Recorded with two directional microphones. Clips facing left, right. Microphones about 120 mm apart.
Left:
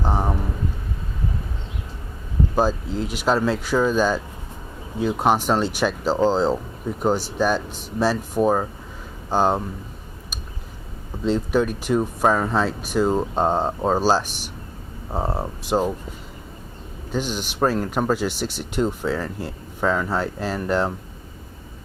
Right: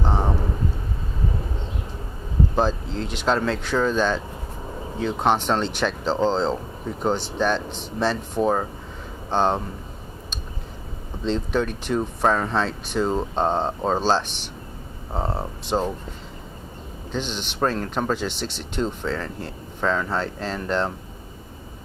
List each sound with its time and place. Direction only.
0.0 s a sound: 10° left (ahead or behind)
2.6 s speech: 5° left (ahead or behind)
11.2 s speech: 10° left (ahead or behind)
17.1 s speech: 10° left (ahead or behind)